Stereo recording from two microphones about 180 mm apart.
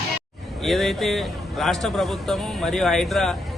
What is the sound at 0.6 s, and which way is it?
A man's voice, centre (ahead or behind).